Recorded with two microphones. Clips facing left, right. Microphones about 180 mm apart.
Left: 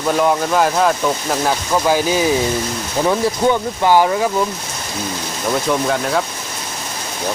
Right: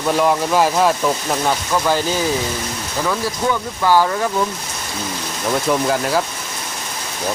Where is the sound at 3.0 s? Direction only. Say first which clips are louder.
Left 5 dB; 25° left (ahead or behind).